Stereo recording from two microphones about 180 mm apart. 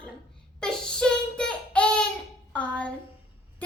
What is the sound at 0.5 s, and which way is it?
Speech, 5° left (ahead or behind).